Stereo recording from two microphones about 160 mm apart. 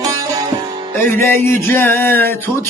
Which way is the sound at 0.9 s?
15° left (ahead or behind).